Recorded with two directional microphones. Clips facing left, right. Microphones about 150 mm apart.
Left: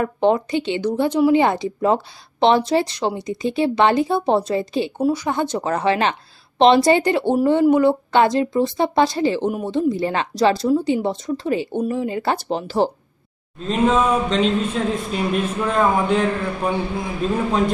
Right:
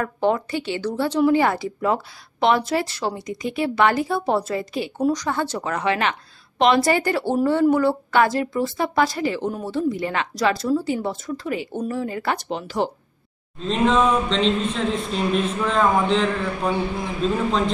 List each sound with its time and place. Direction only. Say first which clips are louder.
0.0 s a woman's voice: left 4 dB; 20° left (ahead or behind)
1.4 s a woman's voice: left 3 dB; 25° left (ahead or behind)
5.0 s a man's voice: even; 10° left (ahead or behind)
5.6 s a woman's voice: left 4 dB; 30° left (ahead or behind)
11.8 s a woman's voice: left 4 dB; 20° left (ahead or behind); by 12.9 s 35° left (ahead or behind)
13.6 s a man's voice: left 1 dB; 5° left (ahead or behind)